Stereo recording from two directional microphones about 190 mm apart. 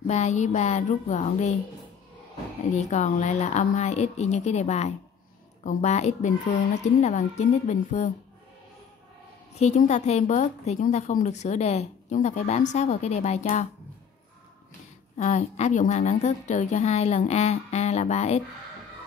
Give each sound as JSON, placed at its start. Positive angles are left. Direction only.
{"t": 0.0, "sound": "a woman's voice", "side_deg": 35}
{"t": 2.7, "sound": "a woman's voice", "side_deg": 35}
{"t": 9.6, "sound": "a woman's voice", "side_deg": 35}
{"t": 15.1, "sound": "a woman's voice", "side_deg": 40}